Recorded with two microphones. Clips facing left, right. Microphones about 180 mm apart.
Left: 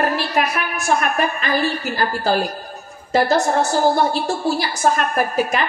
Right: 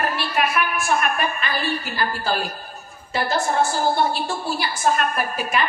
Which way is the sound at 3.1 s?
40° left (ahead or behind).